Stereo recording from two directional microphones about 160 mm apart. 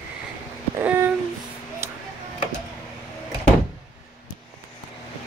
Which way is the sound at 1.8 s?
15° right (ahead or behind).